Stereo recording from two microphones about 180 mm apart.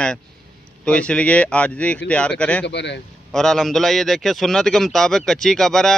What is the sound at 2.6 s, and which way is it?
Speech, 75° left (ahead or behind).